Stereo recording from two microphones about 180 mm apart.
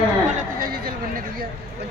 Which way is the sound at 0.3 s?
50° right (ahead or behind).